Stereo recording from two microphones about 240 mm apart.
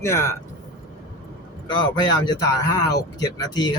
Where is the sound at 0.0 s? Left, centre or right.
Centre.